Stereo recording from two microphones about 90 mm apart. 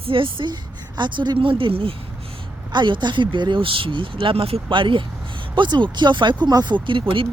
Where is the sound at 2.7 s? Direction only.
60° right (ahead or behind).